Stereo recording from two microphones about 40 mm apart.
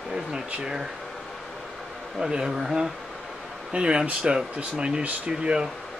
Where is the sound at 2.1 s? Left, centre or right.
Centre.